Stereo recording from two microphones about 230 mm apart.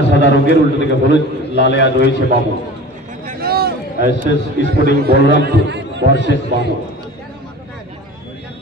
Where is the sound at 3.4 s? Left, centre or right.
Right.